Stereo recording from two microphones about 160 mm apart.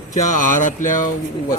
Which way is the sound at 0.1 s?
50° left (ahead or behind).